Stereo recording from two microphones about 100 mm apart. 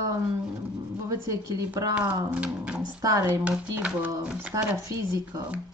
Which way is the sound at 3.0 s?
35° right (ahead or behind).